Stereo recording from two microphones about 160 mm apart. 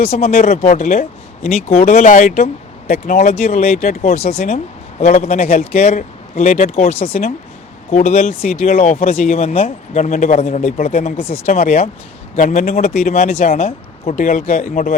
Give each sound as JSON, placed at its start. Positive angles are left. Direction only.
{"t": 0.0, "sound": "speech", "side_deg": 40}